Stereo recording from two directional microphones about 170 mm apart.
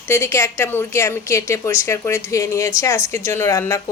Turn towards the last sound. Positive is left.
turn(degrees=20)  # may be behind; listen again after turning